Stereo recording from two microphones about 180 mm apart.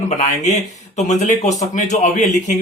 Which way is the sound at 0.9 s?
40° left (ahead or behind).